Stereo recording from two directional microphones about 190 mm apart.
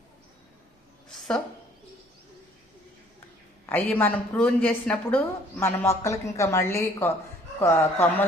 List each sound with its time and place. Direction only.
3.7 s a woman's voice: 10° left (ahead or behind)